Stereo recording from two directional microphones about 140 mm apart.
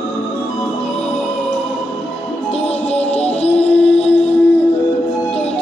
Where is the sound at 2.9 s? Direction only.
45° left (ahead or behind).